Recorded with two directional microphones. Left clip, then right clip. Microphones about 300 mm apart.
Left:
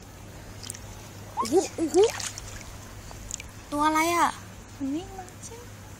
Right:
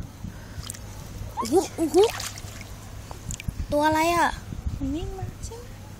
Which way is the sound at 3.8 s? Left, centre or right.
Centre.